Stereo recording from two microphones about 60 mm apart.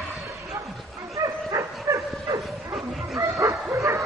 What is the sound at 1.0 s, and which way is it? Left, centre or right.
Dog, right.